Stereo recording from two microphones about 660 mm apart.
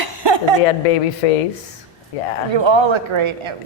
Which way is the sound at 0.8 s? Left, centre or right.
Left.